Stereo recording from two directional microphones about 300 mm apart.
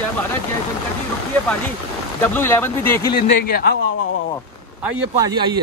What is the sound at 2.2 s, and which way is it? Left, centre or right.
Speech, centre.